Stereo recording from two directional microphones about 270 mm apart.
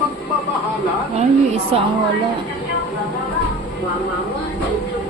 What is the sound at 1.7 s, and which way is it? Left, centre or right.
Speech, right.